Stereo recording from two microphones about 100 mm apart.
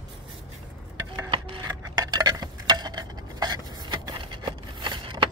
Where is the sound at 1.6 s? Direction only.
40° right (ahead or behind).